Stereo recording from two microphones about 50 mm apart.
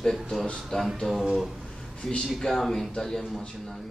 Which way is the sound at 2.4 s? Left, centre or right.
Centre.